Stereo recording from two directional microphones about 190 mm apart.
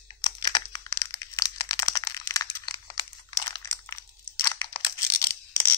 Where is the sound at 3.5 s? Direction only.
15° left (ahead or behind).